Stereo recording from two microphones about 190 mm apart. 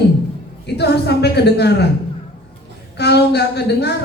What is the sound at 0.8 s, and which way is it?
A woman's voice, 60° left (ahead or behind).